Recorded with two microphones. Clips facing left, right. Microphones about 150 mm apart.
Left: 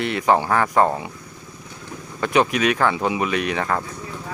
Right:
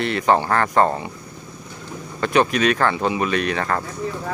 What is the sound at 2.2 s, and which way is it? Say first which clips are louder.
Speech: right 1 dB; 15° left (ahead or behind).